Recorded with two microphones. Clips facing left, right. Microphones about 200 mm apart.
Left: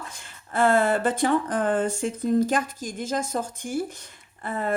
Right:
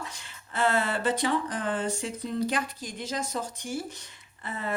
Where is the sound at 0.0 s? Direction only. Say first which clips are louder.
Even; 50° left (ahead or behind).